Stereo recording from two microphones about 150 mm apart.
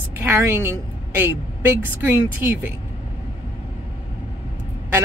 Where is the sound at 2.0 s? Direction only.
15° right (ahead or behind).